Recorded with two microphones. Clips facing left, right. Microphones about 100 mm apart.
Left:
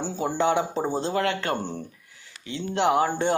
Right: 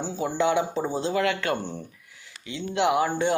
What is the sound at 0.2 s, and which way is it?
Speech, 40° left (ahead or behind).